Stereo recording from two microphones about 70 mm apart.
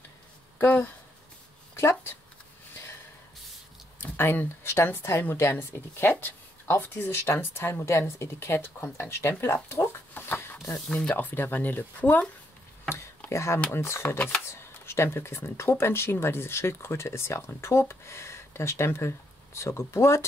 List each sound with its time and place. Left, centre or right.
0.6 s speech: left
1.8 s speech: left
4.0 s speech: left
10.7 s speech: centre
11.1 s speech: left
13.3 s speech: left